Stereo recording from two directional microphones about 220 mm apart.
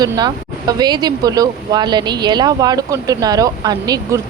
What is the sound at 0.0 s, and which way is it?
Speech, 20° right (ahead or behind).